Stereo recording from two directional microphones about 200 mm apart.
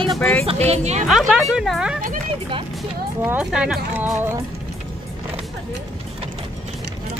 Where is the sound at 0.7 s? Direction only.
35° right (ahead or behind).